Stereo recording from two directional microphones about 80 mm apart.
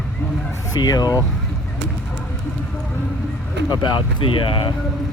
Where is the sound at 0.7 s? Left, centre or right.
Left.